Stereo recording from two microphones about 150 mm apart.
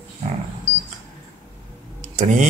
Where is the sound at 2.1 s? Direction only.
55° right (ahead or behind).